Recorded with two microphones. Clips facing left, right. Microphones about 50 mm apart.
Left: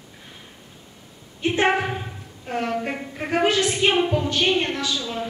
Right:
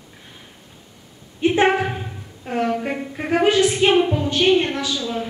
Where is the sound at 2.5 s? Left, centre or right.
Centre.